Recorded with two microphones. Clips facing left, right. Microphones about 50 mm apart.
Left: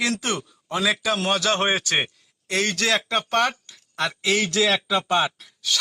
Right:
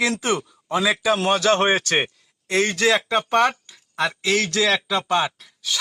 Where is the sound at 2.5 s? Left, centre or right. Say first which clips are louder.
Right 3 dB; centre.